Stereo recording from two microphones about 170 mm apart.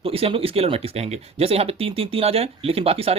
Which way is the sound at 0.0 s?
35° right (ahead or behind).